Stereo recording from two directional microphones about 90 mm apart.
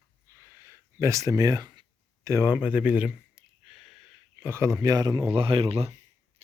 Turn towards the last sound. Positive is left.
turn(degrees=-90)